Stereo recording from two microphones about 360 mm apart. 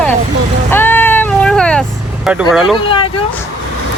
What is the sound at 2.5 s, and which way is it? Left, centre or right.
Speech, centre.